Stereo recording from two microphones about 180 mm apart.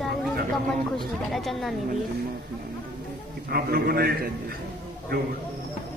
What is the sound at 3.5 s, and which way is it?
Speech, 55° right (ahead or behind).